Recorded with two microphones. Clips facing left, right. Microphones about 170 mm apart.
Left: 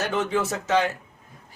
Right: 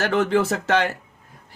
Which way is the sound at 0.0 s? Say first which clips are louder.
Right 5 dB; 70° right (ahead or behind).